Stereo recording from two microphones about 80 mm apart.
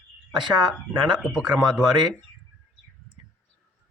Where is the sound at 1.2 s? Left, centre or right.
Centre.